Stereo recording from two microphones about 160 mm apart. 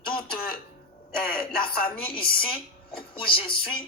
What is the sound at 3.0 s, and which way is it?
Speech, 35° left (ahead or behind).